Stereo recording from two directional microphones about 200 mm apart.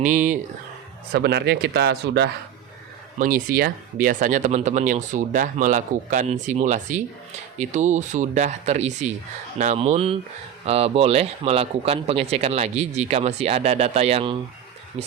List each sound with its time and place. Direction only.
0.0 s speech: 40° right (ahead or behind)
1.1 s a man's voice: 55° right (ahead or behind)
3.2 s speech: 45° right (ahead or behind)